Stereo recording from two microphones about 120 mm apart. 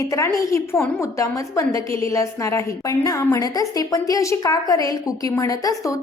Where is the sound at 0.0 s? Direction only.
25° left (ahead or behind).